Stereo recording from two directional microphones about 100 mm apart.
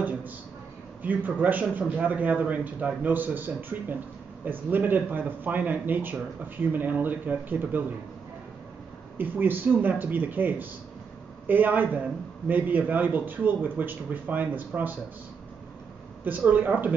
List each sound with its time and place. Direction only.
0.0 s a sound: 15° right (ahead or behind)
1.0 s a man's voice: 15° right (ahead or behind)
9.2 s a man's voice: 20° right (ahead or behind)
16.3 s a man's voice: 15° right (ahead or behind)